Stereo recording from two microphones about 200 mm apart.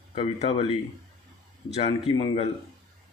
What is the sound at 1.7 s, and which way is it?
Speech, 25° left (ahead or behind).